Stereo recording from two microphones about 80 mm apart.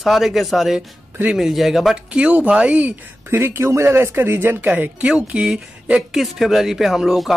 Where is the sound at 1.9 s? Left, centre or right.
Centre.